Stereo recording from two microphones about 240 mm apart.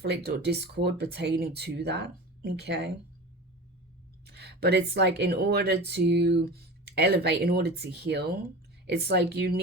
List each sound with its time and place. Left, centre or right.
0.0 s speech: right
4.3 s speech: right